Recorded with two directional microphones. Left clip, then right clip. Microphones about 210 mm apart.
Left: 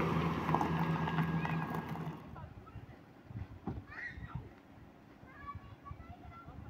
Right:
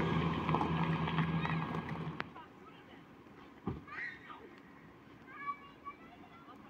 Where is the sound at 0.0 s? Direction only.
20° right (ahead or behind).